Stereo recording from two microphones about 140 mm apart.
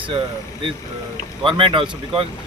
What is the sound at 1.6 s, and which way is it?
Speech, 35° right (ahead or behind).